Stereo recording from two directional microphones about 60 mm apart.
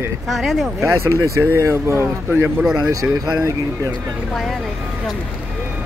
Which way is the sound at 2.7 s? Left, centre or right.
Right.